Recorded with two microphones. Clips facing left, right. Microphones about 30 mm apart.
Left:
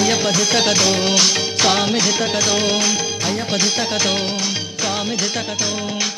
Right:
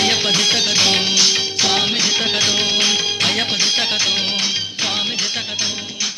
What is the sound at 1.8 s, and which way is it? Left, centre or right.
Music, right.